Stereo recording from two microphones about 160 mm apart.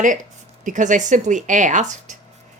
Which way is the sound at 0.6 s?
50° right (ahead or behind).